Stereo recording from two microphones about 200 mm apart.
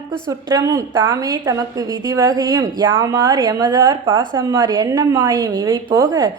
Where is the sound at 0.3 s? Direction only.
20° right (ahead or behind).